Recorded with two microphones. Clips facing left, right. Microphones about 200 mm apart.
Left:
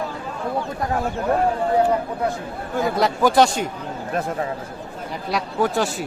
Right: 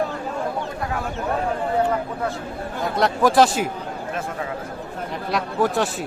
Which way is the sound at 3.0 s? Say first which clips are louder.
Right 1 dB; centre (ahead or behind).